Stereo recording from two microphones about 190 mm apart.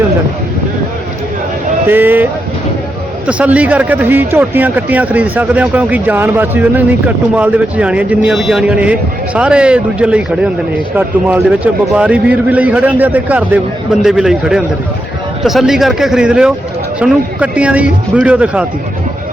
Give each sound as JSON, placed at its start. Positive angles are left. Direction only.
{"t": 1.9, "sound": "a man's voice", "side_deg": -10}
{"t": 3.2, "sound": "a man's voice", "side_deg": -5}